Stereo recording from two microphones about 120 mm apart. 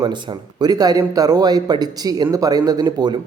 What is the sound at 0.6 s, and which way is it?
A man's voice, 30° right (ahead or behind).